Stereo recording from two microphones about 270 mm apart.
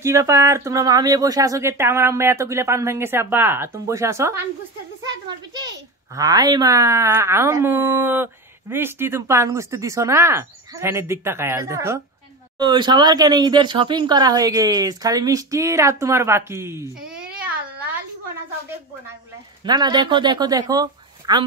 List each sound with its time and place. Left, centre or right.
0.0 s speech: centre
5.0 s a sound: centre
6.1 s speech: centre
19.6 s speech: centre